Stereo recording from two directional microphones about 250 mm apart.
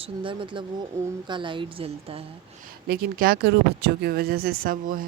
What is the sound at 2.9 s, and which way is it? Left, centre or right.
Speech, right.